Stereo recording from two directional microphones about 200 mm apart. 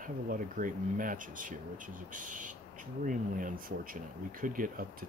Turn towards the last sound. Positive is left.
turn(degrees=-45)  # may be behind; listen again after turning